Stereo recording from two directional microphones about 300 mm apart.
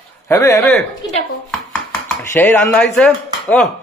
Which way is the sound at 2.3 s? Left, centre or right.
Centre.